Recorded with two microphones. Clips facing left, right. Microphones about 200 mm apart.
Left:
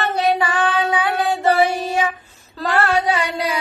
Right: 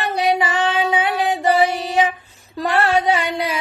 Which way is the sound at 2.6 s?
20° right (ahead or behind).